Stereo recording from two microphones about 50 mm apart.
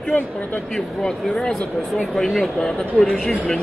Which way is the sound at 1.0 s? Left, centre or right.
Centre.